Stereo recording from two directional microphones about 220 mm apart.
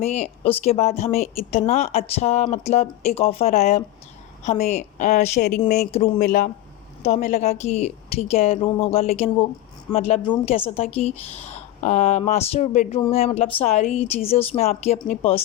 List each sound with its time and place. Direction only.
0.0 s a woman's voice: 30° left (ahead or behind)
5.4 s speech: 45° left (ahead or behind)
5.6 s a woman's voice: 30° left (ahead or behind)
6.1 s a woman's voice: 40° left (ahead or behind)
7.0 s speech: 30° left (ahead or behind)